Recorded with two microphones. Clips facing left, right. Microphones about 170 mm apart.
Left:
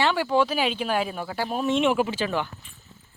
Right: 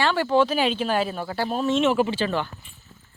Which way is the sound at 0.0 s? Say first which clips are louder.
Right 2 dB; 10° left (ahead or behind).